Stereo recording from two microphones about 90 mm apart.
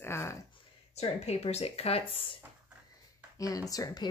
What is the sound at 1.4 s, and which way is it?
Speech, 90° left.